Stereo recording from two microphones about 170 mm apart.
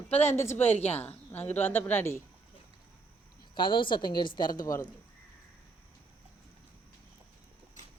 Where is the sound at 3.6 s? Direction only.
30° left (ahead or behind).